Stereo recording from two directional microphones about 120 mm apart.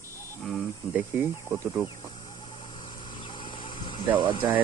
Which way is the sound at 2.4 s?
40° left (ahead or behind).